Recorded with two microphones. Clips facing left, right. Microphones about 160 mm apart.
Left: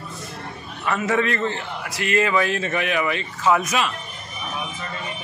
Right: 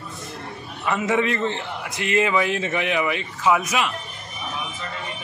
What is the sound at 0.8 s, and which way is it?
A man's voice, 15° right (ahead or behind).